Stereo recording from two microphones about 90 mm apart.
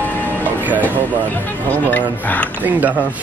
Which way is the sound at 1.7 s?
20° left (ahead or behind).